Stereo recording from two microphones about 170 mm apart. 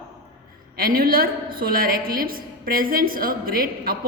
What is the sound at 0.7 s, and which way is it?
A woman's voice, 60° right (ahead or behind).